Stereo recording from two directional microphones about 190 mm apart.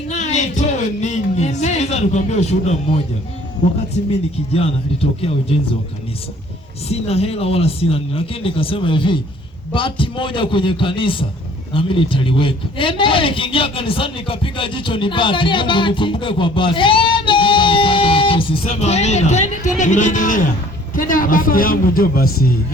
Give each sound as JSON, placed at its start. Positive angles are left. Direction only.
{"t": 0.1, "sound": "music", "side_deg": 40}
{"t": 4.1, "sound": "speech", "side_deg": 30}
{"t": 6.8, "sound": "a man's voice", "side_deg": 30}